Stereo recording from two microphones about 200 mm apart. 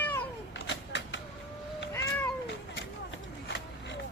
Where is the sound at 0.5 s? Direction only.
65° left (ahead or behind).